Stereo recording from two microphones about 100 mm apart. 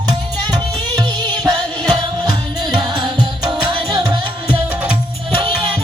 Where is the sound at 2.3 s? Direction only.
45° right (ahead or behind).